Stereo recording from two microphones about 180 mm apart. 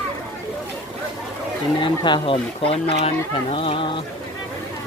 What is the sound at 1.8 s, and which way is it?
Speech, 25° left (ahead or behind).